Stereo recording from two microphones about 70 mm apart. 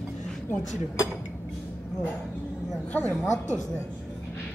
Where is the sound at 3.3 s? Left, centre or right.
Right.